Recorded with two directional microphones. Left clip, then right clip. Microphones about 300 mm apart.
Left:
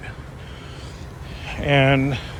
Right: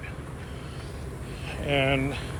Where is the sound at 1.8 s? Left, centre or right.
Left.